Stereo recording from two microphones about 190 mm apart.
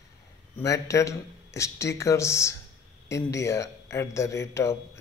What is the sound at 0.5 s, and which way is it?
Speech, 15° left (ahead or behind).